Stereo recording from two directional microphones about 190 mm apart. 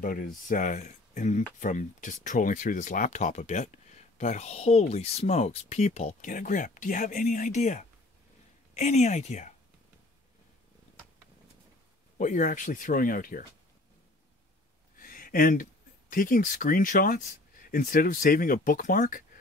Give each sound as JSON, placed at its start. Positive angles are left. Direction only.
{"t": 0.0, "sound": "speech", "side_deg": 45}
{"t": 12.2, "sound": "speech", "side_deg": 40}
{"t": 15.0, "sound": "speech", "side_deg": 50}